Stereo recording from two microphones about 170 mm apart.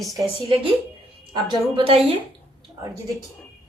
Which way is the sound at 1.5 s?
35° right (ahead or behind).